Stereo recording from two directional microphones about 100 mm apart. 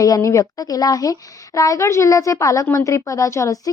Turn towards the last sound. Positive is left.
turn(degrees=35)  # may be behind; listen again after turning